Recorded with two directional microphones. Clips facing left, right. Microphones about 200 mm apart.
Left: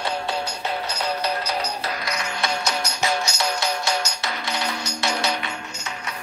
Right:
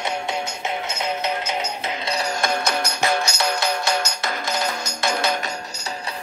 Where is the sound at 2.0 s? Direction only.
30° right (ahead or behind).